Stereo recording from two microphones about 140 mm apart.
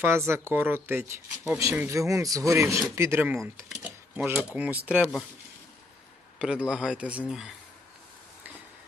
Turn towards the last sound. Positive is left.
turn(degrees=-5)  # may be behind; listen again after turning